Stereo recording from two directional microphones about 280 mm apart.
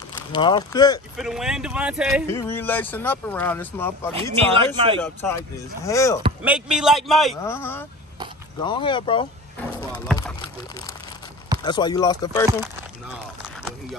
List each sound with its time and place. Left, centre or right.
0.3 s speech: centre
1.1 s a man's voice: centre
2.2 s speech: centre
4.1 s speech: centre
5.0 s speech: centre
6.4 s a man's voice: centre
11.6 s speech: centre